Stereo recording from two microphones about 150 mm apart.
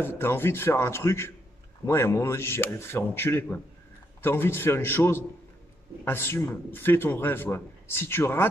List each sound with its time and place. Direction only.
0.0 s a man's voice: 15° left (ahead or behind)